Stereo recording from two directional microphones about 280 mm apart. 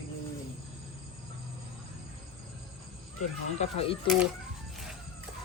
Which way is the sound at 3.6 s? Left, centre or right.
Left.